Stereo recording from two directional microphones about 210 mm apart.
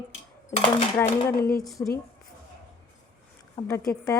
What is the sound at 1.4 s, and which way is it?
Speech, 45° left (ahead or behind).